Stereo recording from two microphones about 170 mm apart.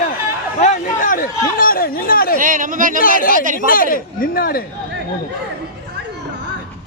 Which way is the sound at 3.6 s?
55° left (ahead or behind).